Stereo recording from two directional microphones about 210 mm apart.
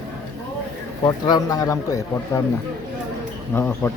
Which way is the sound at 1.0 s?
15° left (ahead or behind).